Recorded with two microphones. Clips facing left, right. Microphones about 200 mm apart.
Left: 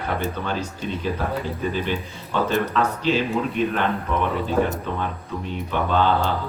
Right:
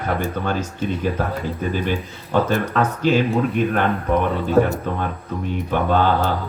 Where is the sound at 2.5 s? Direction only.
50° right (ahead or behind).